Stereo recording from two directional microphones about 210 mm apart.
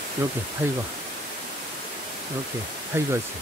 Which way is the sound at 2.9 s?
10° right (ahead or behind).